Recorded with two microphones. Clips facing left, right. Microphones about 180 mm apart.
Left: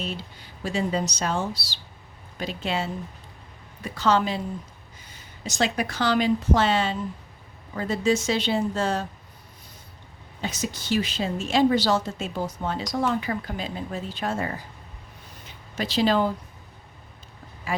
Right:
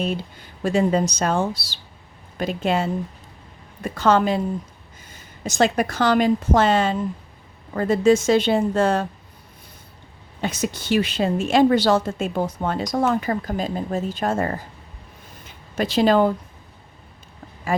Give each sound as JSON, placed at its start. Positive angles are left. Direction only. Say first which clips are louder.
{"t": 0.0, "sound": "a woman's voice", "louder": "right 8 dB", "side_deg": -50}
{"t": 10.4, "sound": "a woman's voice", "louder": "right 5 dB", "side_deg": -55}
{"t": 17.7, "sound": "speech", "louder": "right 6 dB", "side_deg": -50}